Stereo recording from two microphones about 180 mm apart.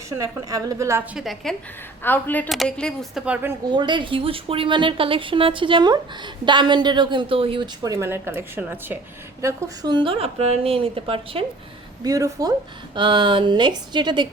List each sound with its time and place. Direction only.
0.2 s a woman's voice: 20° right (ahead or behind)
1.1 s a woman's voice: centre (ahead or behind)
2.0 s a woman's voice: 10° left (ahead or behind); by 3.5 s 5° right (ahead or behind)
3.7 s a woman's voice: 25° right (ahead or behind)
12.0 s a woman's voice: 20° right (ahead or behind)